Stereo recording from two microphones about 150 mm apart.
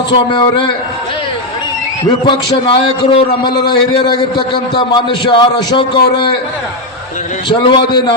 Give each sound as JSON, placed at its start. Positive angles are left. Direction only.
{"t": 0.1, "sound": "a man's voice", "side_deg": 30}
{"t": 2.0, "sound": "a man's voice", "side_deg": 35}
{"t": 7.5, "sound": "a man's voice", "side_deg": 35}